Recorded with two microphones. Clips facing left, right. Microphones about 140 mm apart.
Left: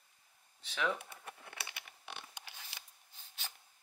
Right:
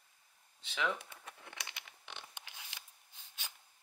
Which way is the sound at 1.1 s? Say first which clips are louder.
Left 2 dB; 20° right (ahead or behind).